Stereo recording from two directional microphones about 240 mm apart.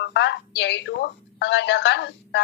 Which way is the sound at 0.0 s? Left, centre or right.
Left.